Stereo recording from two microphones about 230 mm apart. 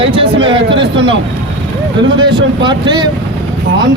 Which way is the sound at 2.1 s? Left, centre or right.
Centre.